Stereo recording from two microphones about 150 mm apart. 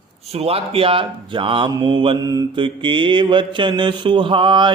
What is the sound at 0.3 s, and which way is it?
Speech, 40° right (ahead or behind).